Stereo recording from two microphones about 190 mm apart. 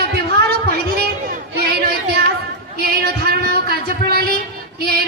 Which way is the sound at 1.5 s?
60° right (ahead or behind).